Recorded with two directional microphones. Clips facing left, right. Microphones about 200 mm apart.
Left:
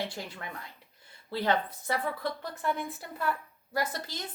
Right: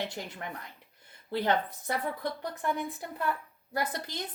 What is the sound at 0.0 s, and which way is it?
A woman's voice, 20° right (ahead or behind).